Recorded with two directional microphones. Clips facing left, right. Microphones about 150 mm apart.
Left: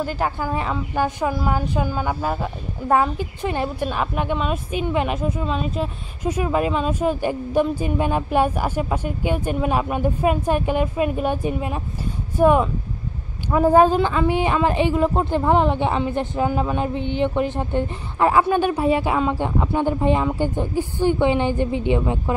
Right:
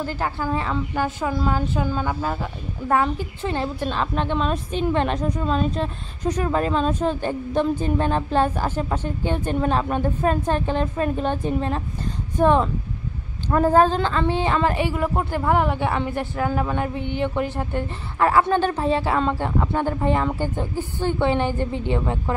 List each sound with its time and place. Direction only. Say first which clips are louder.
0.0 s a woman's voice: left 2 dB; 15° left (ahead or behind)